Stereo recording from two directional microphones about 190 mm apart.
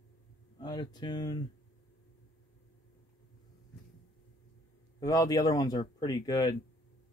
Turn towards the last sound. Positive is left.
turn(degrees=20)  # may be behind; listen again after turning